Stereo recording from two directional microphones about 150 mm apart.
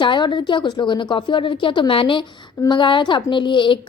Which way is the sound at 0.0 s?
30° left (ahead or behind).